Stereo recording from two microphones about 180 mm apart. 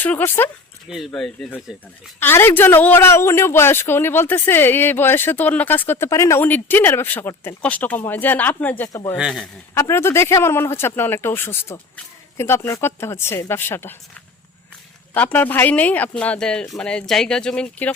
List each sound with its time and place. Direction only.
0.0 s speech: 10° left (ahead or behind)
0.9 s speech: centre (ahead or behind); by 9.1 s 15° left (ahead or behind)
9.1 s speech: centre (ahead or behind)
9.7 s speech: 15° left (ahead or behind)
15.1 s speech: 10° left (ahead or behind)